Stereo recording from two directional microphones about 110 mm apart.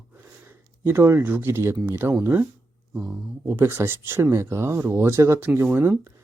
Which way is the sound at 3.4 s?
20° right (ahead or behind).